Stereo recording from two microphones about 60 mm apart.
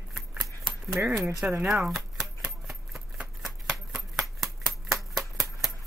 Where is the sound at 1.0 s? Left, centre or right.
Right.